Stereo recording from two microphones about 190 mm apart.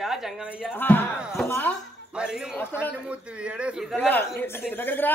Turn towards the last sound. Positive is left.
turn(degrees=10)  # may be behind; listen again after turning